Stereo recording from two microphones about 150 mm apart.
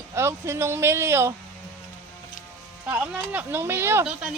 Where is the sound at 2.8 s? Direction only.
10° right (ahead or behind).